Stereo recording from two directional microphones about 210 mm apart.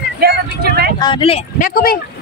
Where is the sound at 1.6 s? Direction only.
45° left (ahead or behind).